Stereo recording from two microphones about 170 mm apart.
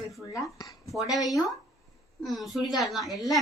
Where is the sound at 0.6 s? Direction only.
20° left (ahead or behind).